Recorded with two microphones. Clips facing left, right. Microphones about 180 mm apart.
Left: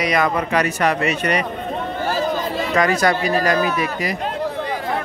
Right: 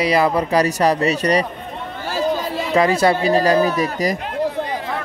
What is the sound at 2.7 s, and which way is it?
Speech, 25° right (ahead or behind).